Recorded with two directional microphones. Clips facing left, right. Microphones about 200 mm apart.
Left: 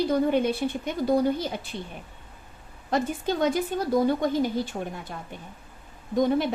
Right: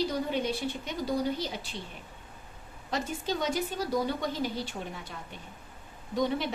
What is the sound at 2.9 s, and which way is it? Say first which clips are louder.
A woman's voice: left 6 dB; 55° left (ahead or behind).